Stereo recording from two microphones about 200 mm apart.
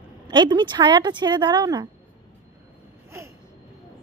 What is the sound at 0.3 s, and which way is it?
Speech, 20° right (ahead or behind).